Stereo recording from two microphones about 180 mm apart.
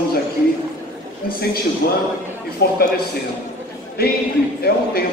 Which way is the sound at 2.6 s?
65° left (ahead or behind).